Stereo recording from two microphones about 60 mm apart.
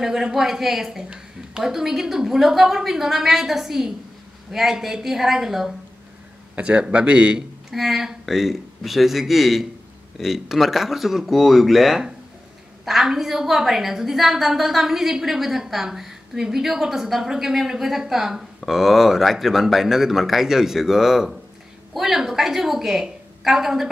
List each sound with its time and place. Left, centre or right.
0.0 s a woman's voice: centre
6.5 s a woman's voice: centre
7.7 s a woman's voice: centre